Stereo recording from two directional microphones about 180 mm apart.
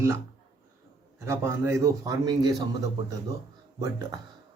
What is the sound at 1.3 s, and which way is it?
A man's voice, 15° right (ahead or behind).